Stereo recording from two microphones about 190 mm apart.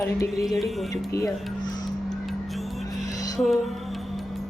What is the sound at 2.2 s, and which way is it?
Music, centre (ahead or behind).